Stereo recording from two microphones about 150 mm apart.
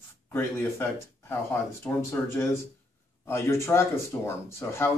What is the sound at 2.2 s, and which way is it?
Speech, 15° left (ahead or behind).